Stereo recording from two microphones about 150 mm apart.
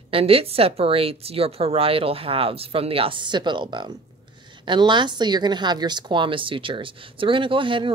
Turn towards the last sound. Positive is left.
turn(degrees=-35)  # may be behind; listen again after turning